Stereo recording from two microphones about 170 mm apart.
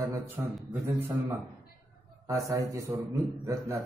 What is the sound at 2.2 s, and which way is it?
A man's voice, 20° right (ahead or behind).